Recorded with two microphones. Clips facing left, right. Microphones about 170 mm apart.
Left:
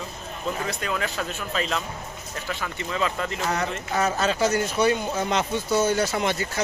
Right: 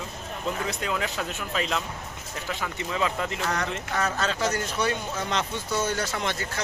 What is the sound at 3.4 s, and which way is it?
Speech, 10° left (ahead or behind).